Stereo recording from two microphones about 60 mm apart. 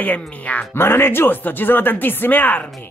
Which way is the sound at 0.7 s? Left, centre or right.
Left.